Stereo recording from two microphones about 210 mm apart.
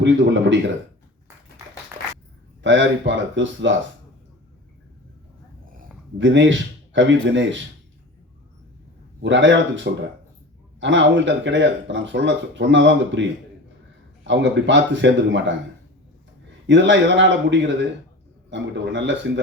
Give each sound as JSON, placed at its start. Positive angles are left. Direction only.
{"t": 0.0, "sound": "speech", "side_deg": -60}
{"t": 2.6, "sound": "speech", "side_deg": -60}
{"t": 6.1, "sound": "speech", "side_deg": -60}
{"t": 9.2, "sound": "speech", "side_deg": -60}
{"t": 16.6, "sound": "speech", "side_deg": -60}